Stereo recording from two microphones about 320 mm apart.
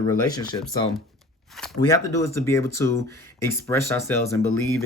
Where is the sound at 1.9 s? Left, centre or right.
Centre.